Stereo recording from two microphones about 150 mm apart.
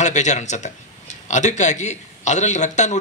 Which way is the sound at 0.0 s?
50° left (ahead or behind).